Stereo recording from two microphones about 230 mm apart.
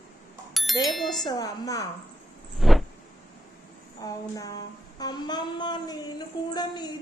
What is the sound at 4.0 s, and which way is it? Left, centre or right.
Speech, centre.